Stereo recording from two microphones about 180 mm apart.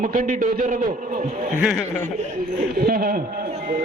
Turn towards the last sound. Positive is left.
turn(degrees=-55)  # may be behind; listen again after turning